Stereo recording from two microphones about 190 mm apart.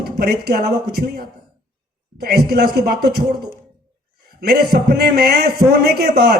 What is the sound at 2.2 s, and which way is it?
Speech, 55° right (ahead or behind).